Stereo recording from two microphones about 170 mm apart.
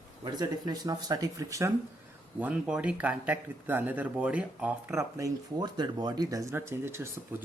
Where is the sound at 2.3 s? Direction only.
10° right (ahead or behind).